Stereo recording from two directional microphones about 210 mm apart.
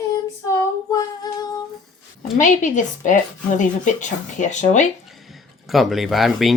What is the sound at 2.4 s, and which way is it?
Speech, 35° left (ahead or behind).